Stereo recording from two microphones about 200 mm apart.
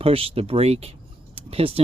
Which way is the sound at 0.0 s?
30° right (ahead or behind).